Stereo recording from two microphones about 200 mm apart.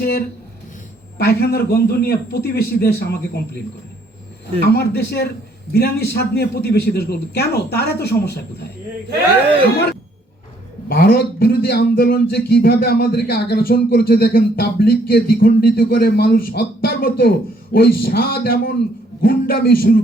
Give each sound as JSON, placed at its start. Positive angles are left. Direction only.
{"t": 1.2, "sound": "a man's voice", "side_deg": 50}
{"t": 4.6, "sound": "a man's voice", "side_deg": 55}
{"t": 10.8, "sound": "a man's voice", "side_deg": 50}